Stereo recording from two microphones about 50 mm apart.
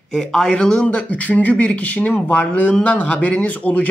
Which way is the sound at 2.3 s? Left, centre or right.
Left.